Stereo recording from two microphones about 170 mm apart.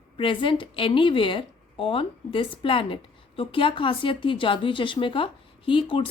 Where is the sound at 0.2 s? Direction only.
30° left (ahead or behind).